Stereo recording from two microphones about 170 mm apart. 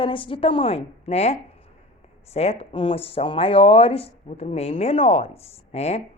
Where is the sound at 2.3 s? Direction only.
40° left (ahead or behind).